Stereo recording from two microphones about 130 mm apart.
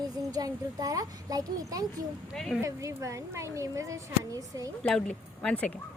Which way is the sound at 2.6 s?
25° right (ahead or behind).